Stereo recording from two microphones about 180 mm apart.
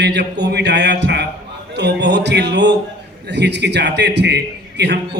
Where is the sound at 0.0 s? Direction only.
70° right (ahead or behind).